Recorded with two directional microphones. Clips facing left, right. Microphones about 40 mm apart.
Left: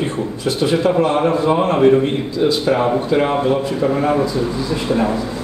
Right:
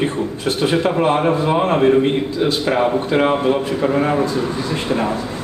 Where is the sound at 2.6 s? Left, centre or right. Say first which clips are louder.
Left 1 dB; right.